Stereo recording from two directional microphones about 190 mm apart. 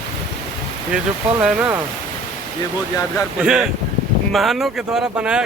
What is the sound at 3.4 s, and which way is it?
Speech, 5° right (ahead or behind).